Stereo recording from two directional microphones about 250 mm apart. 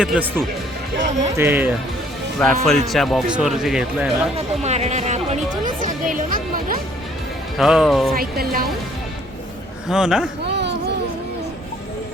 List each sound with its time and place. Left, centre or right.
0.0 s speech: centre
4.4 s music: right
7.6 s speech: centre
8.1 s speech: right
9.9 s speech: centre
10.4 s a sound: right